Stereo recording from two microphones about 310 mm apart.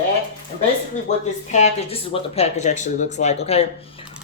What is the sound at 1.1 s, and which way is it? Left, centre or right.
Speech, left.